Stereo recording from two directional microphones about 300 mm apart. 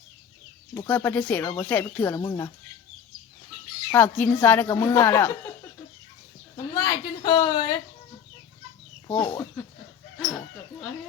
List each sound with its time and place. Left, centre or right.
0.8 s speech: centre
3.9 s speech: centre
6.7 s speech: centre
9.2 s speech: centre
10.2 s chicken: centre